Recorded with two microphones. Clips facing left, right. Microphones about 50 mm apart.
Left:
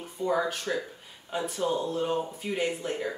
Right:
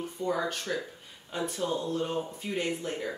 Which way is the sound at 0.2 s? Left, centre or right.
Centre.